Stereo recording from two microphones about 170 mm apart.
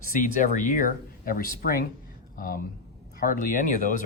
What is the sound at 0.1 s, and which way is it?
Speech, 50° left (ahead or behind).